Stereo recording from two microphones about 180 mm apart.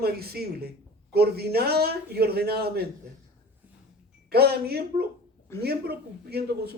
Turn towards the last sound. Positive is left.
turn(degrees=-60)  # may be behind; listen again after turning